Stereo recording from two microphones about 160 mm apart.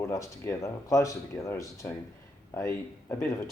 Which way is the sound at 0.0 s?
15° left (ahead or behind).